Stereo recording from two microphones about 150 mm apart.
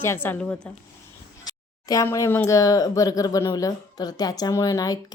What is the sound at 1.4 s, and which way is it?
Speech, 25° left (ahead or behind).